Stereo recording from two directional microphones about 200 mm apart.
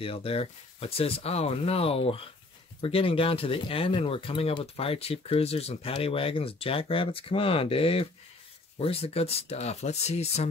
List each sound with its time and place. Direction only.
0.0 s speech: 30° left (ahead or behind)